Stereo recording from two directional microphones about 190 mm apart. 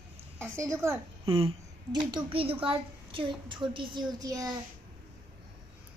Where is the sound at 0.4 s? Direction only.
15° right (ahead or behind).